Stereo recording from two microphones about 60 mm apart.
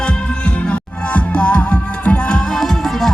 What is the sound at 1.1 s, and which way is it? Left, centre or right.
Music, centre.